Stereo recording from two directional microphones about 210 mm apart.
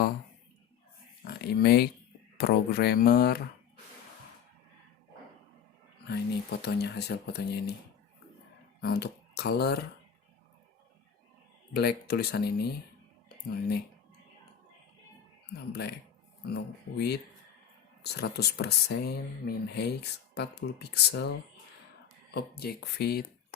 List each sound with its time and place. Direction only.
1.2 s speech: 50° left (ahead or behind)
6.1 s speech: 50° left (ahead or behind)
8.8 s speech: 50° left (ahead or behind)
11.7 s speech: 50° left (ahead or behind)
13.2 s a sound: 50° left (ahead or behind)
15.7 s speech: 50° left (ahead or behind)